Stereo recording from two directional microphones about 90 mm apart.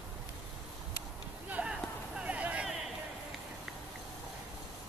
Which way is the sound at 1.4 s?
15° right (ahead or behind).